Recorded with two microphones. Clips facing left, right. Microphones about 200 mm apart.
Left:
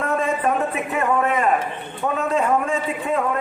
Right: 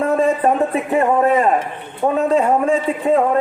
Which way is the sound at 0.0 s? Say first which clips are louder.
Right 6 dB; 35° right (ahead or behind).